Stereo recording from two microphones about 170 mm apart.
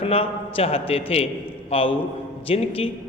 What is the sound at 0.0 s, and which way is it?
A man's voice, 35° left (ahead or behind).